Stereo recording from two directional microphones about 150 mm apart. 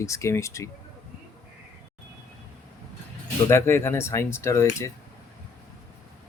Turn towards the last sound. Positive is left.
turn(degrees=20)  # may be behind; listen again after turning